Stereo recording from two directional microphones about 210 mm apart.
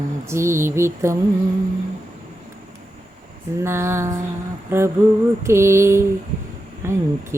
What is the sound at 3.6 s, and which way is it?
Speech, 10° right (ahead or behind).